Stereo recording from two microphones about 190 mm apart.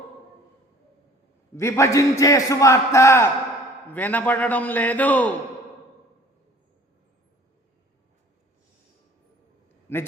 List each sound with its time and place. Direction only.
1.5 s a man's voice: 15° left (ahead or behind)